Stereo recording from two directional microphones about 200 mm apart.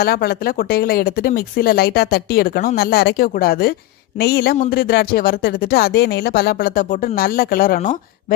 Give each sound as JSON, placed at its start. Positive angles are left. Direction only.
{"t": 0.0, "sound": "speech", "side_deg": 50}